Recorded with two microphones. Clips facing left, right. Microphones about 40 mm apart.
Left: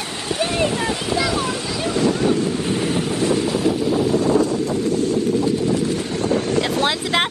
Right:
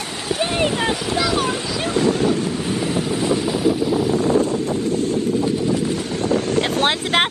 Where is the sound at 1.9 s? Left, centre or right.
Right.